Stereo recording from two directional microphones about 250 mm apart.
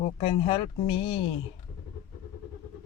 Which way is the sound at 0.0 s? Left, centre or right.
Left.